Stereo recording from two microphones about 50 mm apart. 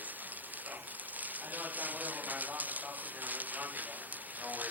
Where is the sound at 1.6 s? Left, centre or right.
Right.